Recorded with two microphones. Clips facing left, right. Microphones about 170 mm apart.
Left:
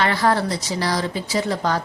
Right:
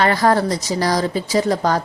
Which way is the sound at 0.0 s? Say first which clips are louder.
Right 4 dB; 45° right (ahead or behind).